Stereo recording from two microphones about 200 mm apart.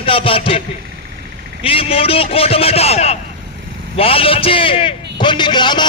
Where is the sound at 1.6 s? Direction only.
30° left (ahead or behind).